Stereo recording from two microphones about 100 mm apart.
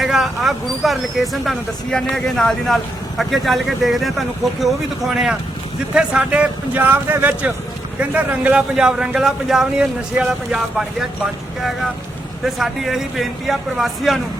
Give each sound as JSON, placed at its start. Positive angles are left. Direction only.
{"t": 0.0, "sound": "speech", "side_deg": -5}
{"t": 12.5, "sound": "speech", "side_deg": 0}